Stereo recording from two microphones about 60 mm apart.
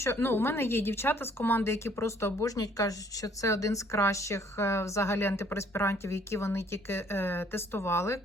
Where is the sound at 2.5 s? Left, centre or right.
Left.